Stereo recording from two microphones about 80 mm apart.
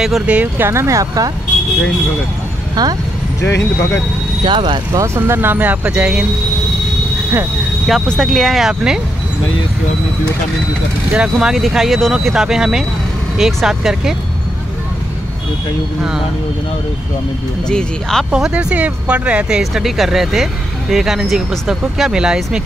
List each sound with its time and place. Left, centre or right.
0.3 s speech: centre
0.7 s speech: right
2.7 s speech: right
3.3 s speech: left
4.5 s speech: right
4.9 s speech: right; by 6.2 s centre
7.8 s speech: centre
11.1 s speech: centre
17.6 s speech: centre
18.3 s speech: centre
19.6 s speech: centre